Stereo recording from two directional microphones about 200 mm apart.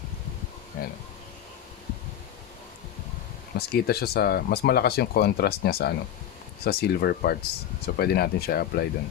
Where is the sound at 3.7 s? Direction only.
50° left (ahead or behind).